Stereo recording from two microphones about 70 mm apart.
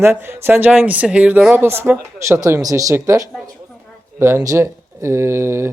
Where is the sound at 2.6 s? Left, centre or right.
Right.